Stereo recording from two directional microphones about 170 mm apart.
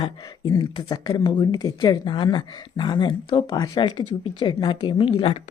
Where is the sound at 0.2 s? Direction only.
20° left (ahead or behind).